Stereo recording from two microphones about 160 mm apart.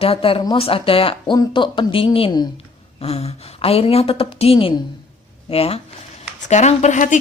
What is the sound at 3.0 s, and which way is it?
Speech, 40° left (ahead or behind).